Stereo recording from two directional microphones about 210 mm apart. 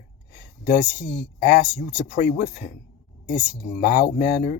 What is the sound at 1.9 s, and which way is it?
Speech, 50° left (ahead or behind).